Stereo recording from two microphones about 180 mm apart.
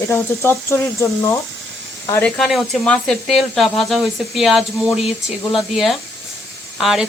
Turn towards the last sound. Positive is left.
turn(degrees=0)  # may be behind; listen again after turning